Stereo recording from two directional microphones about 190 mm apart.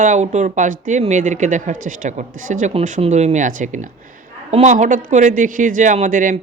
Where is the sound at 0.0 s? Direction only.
40° right (ahead or behind).